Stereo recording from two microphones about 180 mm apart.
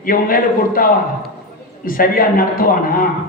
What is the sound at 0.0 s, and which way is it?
A man's voice, 50° left (ahead or behind).